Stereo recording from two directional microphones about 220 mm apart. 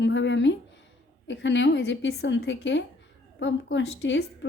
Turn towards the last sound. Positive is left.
turn(degrees=55)  # may be behind; listen again after turning